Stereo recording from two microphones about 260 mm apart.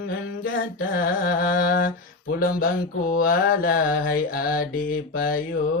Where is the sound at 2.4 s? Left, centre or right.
Left.